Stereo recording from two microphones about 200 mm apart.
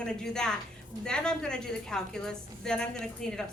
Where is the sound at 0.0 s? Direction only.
5° left (ahead or behind).